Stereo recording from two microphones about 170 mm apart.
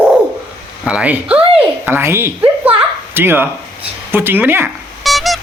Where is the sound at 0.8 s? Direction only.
5° right (ahead or behind).